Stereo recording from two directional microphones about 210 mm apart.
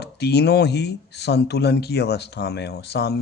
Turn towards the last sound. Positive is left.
turn(degrees=50)  # may be behind; listen again after turning